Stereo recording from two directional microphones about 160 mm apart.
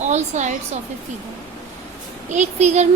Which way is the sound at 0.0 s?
45° right (ahead or behind).